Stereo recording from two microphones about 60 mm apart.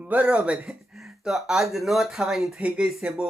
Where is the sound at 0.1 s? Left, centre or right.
Right.